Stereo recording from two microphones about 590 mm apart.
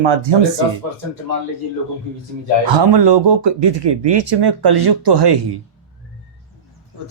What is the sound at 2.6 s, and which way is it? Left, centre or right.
Speech, right.